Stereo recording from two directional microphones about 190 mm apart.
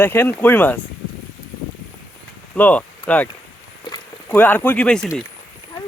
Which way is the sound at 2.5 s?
5° left (ahead or behind).